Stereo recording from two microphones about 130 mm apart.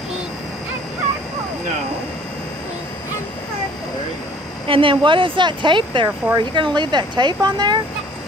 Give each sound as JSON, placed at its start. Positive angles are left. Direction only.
{"t": 4.6, "sound": "speech", "side_deg": -40}